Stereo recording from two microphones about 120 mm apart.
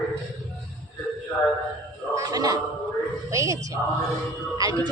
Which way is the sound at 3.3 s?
25° right (ahead or behind).